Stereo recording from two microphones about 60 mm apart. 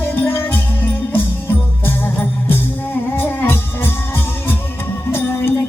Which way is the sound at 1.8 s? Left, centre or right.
Left.